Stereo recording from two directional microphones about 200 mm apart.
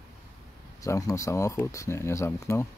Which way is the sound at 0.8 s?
15° left (ahead or behind).